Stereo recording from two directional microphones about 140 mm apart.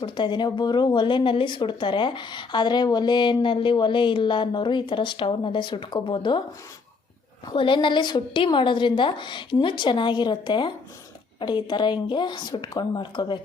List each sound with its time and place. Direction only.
0.0 s speech: 35° left (ahead or behind)
7.4 s speech: 35° left (ahead or behind)